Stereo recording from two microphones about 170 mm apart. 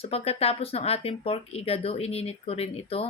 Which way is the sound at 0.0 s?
35° left (ahead or behind).